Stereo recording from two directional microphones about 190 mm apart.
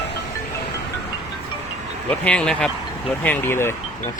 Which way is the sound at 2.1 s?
5° left (ahead or behind).